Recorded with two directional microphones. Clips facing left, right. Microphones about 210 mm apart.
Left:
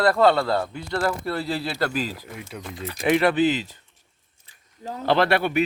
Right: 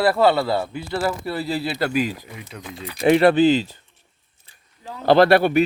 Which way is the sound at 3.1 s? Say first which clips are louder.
Right 5 dB; 30° right (ahead or behind).